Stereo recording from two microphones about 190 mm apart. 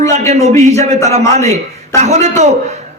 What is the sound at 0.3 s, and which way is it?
Speech, 35° right (ahead or behind).